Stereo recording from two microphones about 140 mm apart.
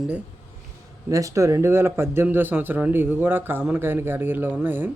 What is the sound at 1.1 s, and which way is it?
Speech, 20° right (ahead or behind).